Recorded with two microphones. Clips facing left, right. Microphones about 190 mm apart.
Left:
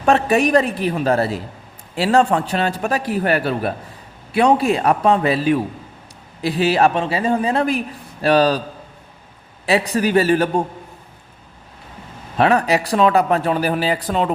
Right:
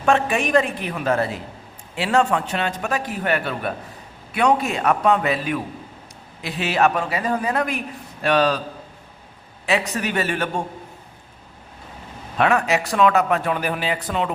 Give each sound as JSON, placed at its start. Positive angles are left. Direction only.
{"t": 0.0, "sound": "speech", "side_deg": 35}
{"t": 9.6, "sound": "speech", "side_deg": 35}
{"t": 12.4, "sound": "speech", "side_deg": 35}